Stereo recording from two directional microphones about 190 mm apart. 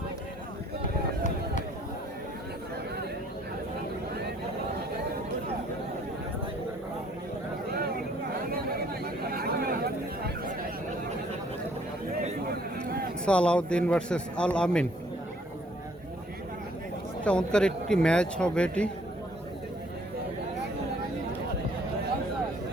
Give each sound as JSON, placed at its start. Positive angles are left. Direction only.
{"t": 7.7, "sound": "chatter", "side_deg": -55}
{"t": 13.2, "sound": "a man's voice", "side_deg": 5}
{"t": 17.2, "sound": "a man's voice", "side_deg": 5}